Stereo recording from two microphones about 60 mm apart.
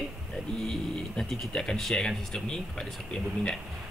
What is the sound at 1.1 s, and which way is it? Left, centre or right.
Speech, centre.